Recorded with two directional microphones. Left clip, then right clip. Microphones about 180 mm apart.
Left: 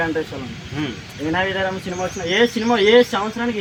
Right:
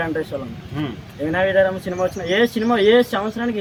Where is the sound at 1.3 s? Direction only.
25° right (ahead or behind).